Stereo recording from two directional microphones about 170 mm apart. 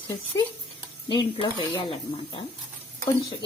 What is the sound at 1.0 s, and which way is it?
Speech, 25° left (ahead or behind).